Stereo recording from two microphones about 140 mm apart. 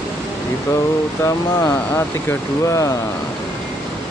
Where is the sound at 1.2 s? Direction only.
20° left (ahead or behind).